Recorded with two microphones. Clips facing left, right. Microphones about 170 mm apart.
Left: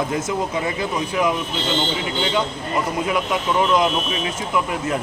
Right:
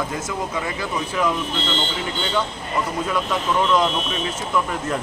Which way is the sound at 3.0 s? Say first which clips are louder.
Left 1 dB; 15° left (ahead or behind).